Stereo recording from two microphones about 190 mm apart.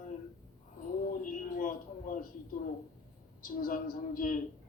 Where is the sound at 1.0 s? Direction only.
45° left (ahead or behind).